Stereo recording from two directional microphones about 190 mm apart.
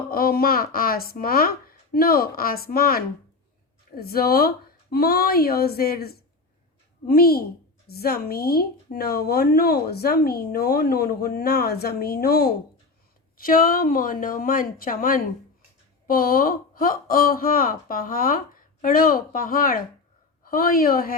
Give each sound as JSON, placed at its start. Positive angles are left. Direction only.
{"t": 0.1, "sound": "a woman's voice", "side_deg": 50}